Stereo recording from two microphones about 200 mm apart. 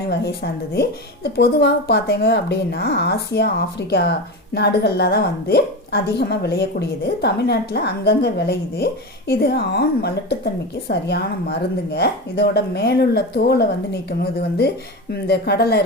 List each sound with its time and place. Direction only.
0.1 s a woman's voice: 55° left (ahead or behind)
15.1 s speech: 55° left (ahead or behind)